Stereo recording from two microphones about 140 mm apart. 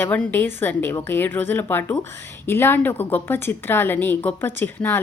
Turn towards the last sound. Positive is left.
turn(degrees=15)  # may be behind; listen again after turning